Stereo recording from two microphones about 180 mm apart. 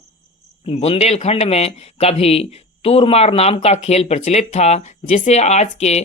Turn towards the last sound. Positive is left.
turn(degrees=35)  # may be behind; listen again after turning